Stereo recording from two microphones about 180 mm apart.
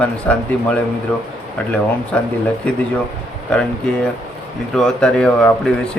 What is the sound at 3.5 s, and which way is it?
Speech, 5° left (ahead or behind).